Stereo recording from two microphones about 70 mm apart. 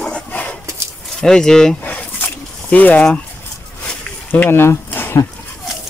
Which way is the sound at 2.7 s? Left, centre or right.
Left.